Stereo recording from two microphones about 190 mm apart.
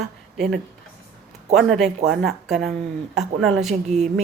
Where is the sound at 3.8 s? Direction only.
35° right (ahead or behind).